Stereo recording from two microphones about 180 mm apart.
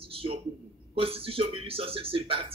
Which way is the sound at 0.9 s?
30° right (ahead or behind).